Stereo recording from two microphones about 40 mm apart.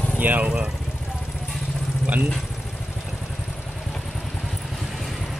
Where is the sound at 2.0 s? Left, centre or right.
Right.